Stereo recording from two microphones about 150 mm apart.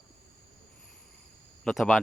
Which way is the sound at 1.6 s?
Centre (ahead or behind).